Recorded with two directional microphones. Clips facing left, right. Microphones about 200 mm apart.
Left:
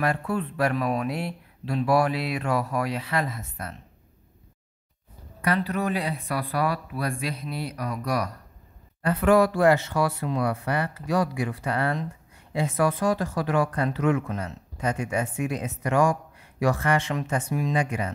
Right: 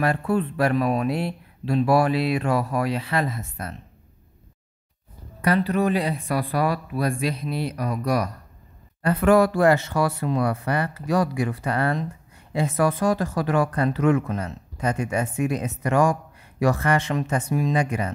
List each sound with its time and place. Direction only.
0.0 s speech: 30° right (ahead or behind)
5.4 s speech: 30° right (ahead or behind)
9.0 s speech: 45° right (ahead or behind)